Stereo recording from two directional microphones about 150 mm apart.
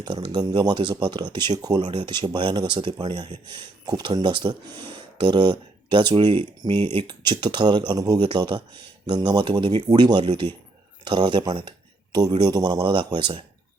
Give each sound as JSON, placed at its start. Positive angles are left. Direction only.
{"t": 0.0, "sound": "speech", "side_deg": -30}